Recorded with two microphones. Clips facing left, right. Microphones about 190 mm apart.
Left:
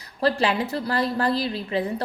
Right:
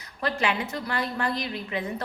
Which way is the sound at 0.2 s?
35° left (ahead or behind).